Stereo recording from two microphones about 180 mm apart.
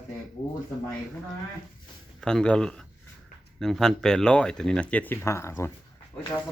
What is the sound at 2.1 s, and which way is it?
Speech, 5° left (ahead or behind).